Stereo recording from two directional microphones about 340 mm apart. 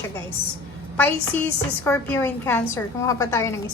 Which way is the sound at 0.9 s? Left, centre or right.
Centre.